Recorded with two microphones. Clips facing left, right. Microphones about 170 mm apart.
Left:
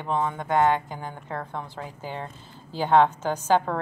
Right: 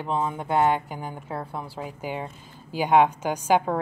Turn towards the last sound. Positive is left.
turn(degrees=-10)  # may be behind; listen again after turning